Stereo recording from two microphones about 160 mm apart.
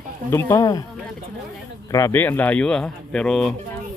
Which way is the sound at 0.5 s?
20° left (ahead or behind).